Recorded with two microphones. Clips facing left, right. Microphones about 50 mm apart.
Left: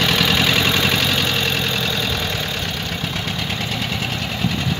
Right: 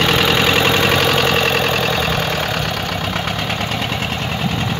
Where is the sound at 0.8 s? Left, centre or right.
Right.